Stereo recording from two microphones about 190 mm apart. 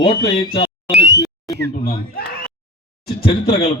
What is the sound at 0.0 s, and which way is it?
Speech, 25° left (ahead or behind).